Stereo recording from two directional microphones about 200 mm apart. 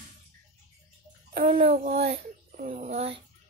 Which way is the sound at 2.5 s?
45° right (ahead or behind).